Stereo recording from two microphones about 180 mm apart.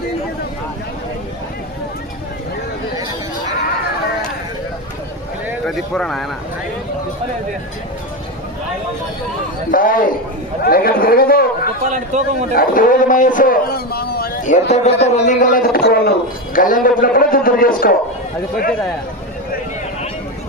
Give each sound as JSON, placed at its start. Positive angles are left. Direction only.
{"t": 5.6, "sound": "speech", "side_deg": 5}
{"t": 9.7, "sound": "a man's voice", "side_deg": 50}
{"t": 11.9, "sound": "a man's voice", "side_deg": -40}
{"t": 12.5, "sound": "a man's voice", "side_deg": 50}
{"t": 14.7, "sound": "a man's voice", "side_deg": 35}
{"t": 15.3, "sound": "a man's voice", "side_deg": 45}